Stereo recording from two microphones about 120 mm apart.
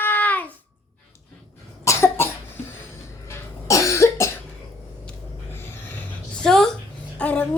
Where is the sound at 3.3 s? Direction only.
25° left (ahead or behind).